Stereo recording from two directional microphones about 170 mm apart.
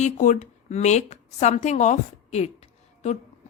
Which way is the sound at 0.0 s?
50° left (ahead or behind).